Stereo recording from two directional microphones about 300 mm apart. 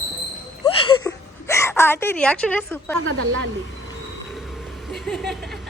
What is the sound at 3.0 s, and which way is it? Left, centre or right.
Speech, right.